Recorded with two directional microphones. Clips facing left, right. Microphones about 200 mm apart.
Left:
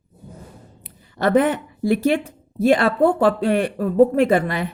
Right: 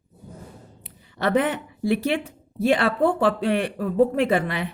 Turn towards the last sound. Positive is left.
turn(degrees=45)  # may be behind; listen again after turning